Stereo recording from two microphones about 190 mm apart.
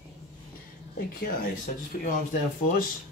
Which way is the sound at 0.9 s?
50° left (ahead or behind).